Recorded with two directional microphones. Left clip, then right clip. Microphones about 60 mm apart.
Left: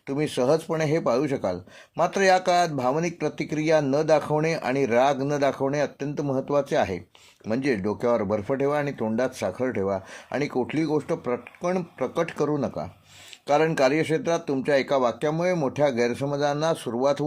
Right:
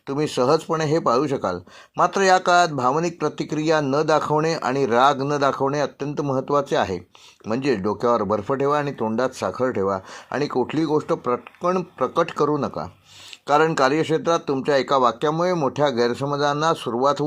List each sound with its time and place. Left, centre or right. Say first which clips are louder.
0.1 s speech: right 3 dB; right
13.7 s speech: right 3 dB; right